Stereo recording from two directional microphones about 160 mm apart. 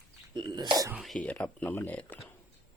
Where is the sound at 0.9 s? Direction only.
Centre (ahead or behind).